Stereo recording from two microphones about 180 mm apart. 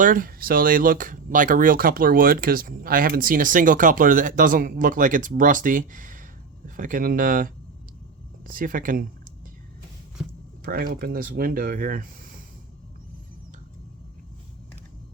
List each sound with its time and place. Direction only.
0.0 s speech: 50° right (ahead or behind)
10.6 s speech: 55° right (ahead or behind)